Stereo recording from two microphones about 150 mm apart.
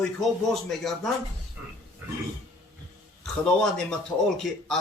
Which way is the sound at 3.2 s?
5° left (ahead or behind).